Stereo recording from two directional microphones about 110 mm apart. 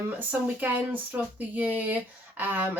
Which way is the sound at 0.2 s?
15° right (ahead or behind).